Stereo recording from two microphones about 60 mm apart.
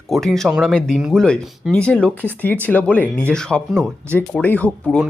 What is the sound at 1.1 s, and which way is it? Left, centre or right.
Speech, centre.